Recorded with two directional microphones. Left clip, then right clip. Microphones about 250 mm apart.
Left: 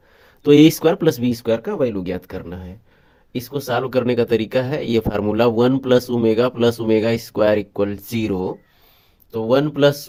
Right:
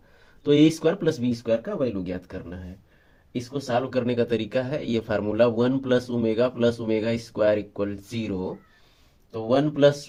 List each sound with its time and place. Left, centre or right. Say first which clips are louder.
0.4 s speech: left 7 dB; left
9.5 s speech: left 4 dB; left